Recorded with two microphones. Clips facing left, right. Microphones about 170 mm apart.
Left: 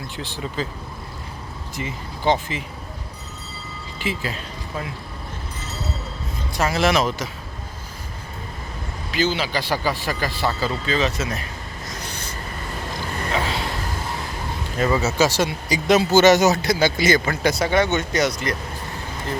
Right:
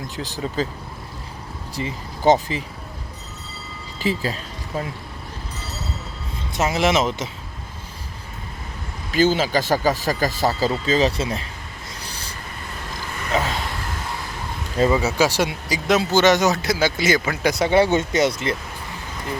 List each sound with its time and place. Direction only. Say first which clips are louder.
0.2 s speech: right 3 dB; 40° right (ahead or behind)
1.7 s speech: right 2 dB; 40° right (ahead or behind)
4.0 s speech: right 4 dB; 35° right (ahead or behind)
6.5 s speech: even; 20° right (ahead or behind)
9.1 s speech: right 4 dB; 45° right (ahead or behind); by 11.4 s 30° right (ahead or behind)
11.9 s a sound: left 3 dB; 35° right (ahead or behind)
14.8 s speech: even; 15° right (ahead or behind)
15.7 s speech: left 3 dB; centre (ahead or behind)
16.6 s speech: left 1 dB; 5° right (ahead or behind); by 18.5 s 25° right (ahead or behind)